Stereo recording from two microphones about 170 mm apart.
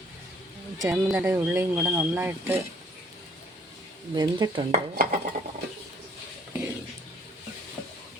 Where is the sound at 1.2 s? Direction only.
15° right (ahead or behind).